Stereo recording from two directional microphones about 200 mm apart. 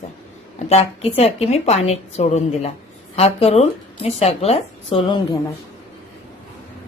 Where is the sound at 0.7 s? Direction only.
30° left (ahead or behind).